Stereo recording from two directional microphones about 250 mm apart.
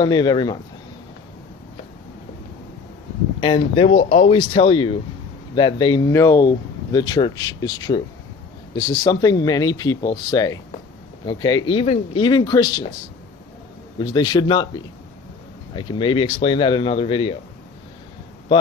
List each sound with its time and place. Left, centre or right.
0.0 s speech: centre
3.3 s speech: centre
13.9 s speech: centre